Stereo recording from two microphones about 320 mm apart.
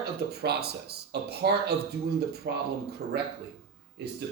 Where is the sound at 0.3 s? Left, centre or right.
Right.